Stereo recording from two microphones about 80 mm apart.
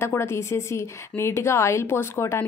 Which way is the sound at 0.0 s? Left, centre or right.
Left.